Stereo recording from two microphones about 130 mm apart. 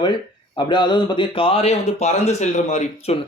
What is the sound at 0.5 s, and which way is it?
Speech, 35° left (ahead or behind).